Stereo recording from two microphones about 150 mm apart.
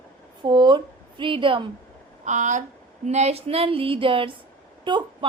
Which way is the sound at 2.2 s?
55° right (ahead or behind).